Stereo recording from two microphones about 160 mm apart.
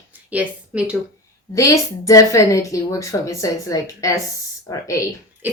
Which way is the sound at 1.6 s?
20° left (ahead or behind).